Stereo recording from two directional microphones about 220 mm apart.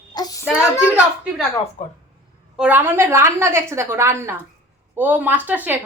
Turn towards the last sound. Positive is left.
turn(degrees=-5)  # may be behind; listen again after turning